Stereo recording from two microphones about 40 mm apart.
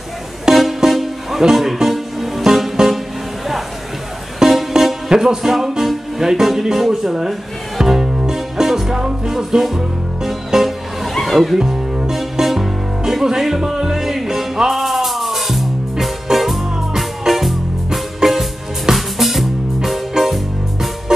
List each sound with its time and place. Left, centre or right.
0.6 s music: centre
4.4 s music: centre
11.1 s music: centre
11.5 s music: centre